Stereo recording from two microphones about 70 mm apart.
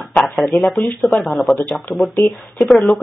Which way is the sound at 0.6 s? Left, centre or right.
Centre.